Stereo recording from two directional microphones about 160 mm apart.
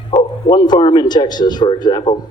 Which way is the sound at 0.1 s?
30° left (ahead or behind).